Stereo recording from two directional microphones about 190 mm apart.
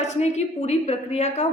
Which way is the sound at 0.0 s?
35° left (ahead or behind).